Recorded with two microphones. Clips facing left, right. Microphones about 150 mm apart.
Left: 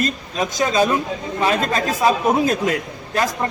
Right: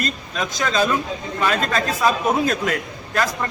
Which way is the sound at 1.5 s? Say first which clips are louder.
Left 2 dB; 20° left (ahead or behind).